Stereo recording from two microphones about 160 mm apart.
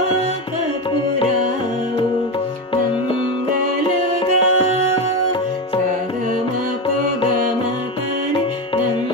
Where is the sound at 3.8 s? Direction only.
35° left (ahead or behind).